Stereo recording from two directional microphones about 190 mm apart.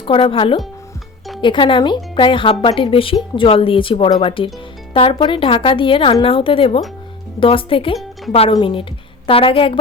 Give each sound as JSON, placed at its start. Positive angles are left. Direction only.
{"t": 0.0, "sound": "speech", "side_deg": 30}